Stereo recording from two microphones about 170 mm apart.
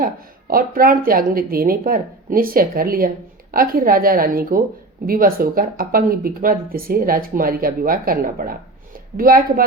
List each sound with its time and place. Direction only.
0.0 s speech: 60° right (ahead or behind)